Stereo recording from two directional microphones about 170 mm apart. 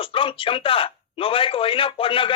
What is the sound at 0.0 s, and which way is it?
Speech, 30° left (ahead or behind).